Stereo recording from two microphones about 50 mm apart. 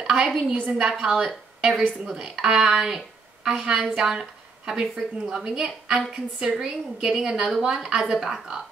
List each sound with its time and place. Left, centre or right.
0.0 s a woman's voice: centre
1.0 s a woman's voice: centre